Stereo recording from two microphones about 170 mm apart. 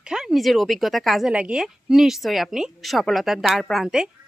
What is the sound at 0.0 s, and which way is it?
Speech, 5° right (ahead or behind).